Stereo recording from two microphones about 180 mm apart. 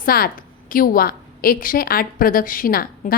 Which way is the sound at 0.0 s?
55° left (ahead or behind).